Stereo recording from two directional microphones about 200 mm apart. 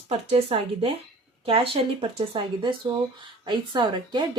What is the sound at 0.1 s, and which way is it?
Speech, 30° right (ahead or behind).